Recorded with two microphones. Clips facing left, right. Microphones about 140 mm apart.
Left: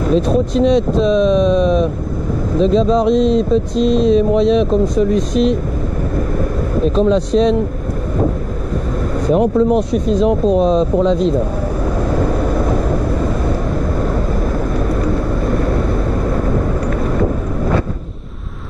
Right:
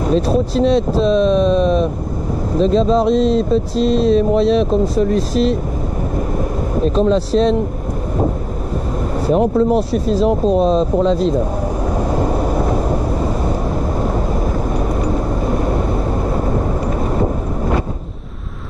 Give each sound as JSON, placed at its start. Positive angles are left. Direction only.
{"t": 0.1, "sound": "speech", "side_deg": 0}
{"t": 6.8, "sound": "speech", "side_deg": 0}
{"t": 9.3, "sound": "speech", "side_deg": 0}
{"t": 12.1, "sound": "vehicle", "side_deg": -30}